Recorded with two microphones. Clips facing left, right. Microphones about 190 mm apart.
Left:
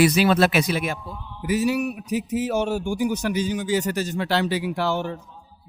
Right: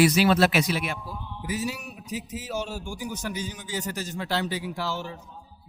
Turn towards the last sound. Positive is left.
turn(degrees=60)  # may be behind; listen again after turning